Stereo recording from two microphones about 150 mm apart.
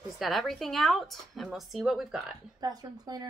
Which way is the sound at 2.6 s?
25° right (ahead or behind).